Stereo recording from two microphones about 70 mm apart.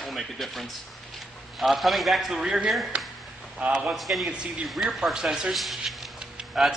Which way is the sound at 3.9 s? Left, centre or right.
Centre.